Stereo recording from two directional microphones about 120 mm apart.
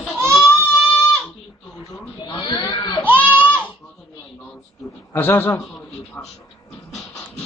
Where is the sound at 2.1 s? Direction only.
40° left (ahead or behind).